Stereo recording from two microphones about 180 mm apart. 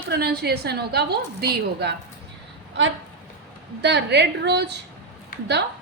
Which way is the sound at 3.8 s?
70° right (ahead or behind).